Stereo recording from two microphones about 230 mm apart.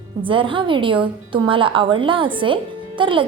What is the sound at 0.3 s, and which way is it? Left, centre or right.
Speech, right.